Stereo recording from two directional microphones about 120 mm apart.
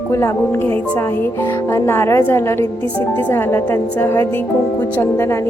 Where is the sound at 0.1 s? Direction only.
25° left (ahead or behind).